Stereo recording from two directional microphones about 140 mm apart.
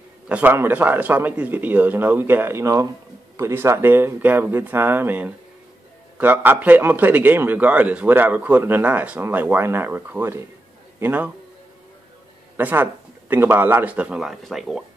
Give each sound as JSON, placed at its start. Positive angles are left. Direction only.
{"t": 0.3, "sound": "a man's voice", "side_deg": -15}
{"t": 12.5, "sound": "a man's voice", "side_deg": -15}